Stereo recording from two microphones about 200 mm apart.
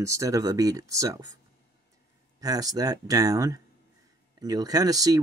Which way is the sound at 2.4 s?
20° right (ahead or behind).